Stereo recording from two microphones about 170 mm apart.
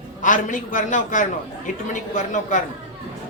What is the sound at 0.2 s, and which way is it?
A man's voice, 50° left (ahead or behind).